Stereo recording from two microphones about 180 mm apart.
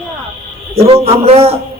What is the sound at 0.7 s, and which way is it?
Speech, 35° right (ahead or behind).